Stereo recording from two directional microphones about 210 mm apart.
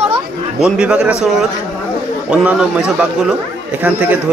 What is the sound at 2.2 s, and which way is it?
Speech, 5° right (ahead or behind).